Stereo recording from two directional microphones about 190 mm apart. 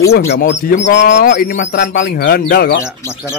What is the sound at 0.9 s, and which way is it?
Speech, 65° left (ahead or behind).